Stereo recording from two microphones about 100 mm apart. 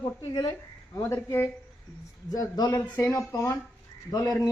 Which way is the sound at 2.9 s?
25° left (ahead or behind).